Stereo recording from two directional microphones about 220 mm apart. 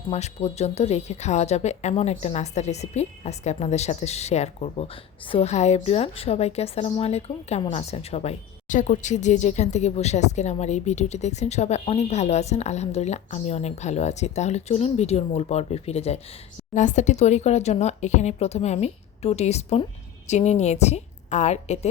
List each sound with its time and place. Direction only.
0.1 s a woman's voice: 30° left (ahead or behind)